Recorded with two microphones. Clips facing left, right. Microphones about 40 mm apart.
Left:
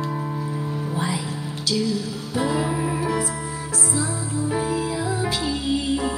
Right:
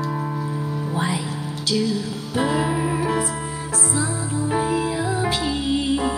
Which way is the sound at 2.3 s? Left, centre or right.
Right.